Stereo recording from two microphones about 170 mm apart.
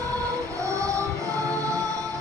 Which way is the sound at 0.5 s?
20° right (ahead or behind).